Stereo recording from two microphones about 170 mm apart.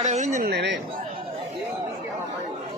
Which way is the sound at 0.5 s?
85° right.